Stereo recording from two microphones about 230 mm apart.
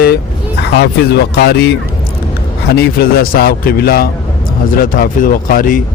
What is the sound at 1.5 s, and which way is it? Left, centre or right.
Speech, left.